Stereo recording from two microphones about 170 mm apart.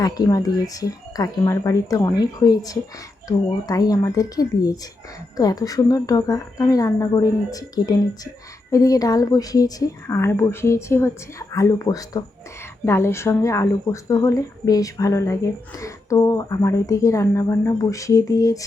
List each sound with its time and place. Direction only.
0.0 s speech: 20° left (ahead or behind)